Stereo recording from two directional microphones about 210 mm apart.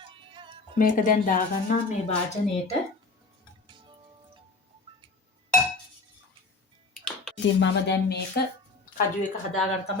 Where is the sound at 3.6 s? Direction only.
25° right (ahead or behind).